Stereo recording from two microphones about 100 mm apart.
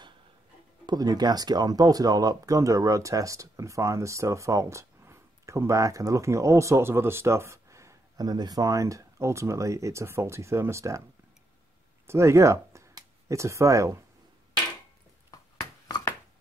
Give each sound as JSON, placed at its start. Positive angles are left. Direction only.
{"t": 0.8, "sound": "speech", "side_deg": -40}
{"t": 12.1, "sound": "speech", "side_deg": -30}